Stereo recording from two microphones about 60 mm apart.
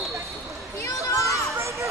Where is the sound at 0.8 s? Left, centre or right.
Left.